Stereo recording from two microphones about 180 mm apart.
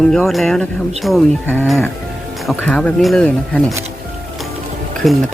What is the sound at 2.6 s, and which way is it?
Speech, 5° left (ahead or behind).